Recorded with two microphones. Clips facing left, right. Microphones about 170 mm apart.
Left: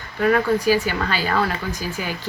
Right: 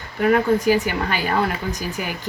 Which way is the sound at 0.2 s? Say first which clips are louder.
Right 1 dB; 20° right (ahead or behind).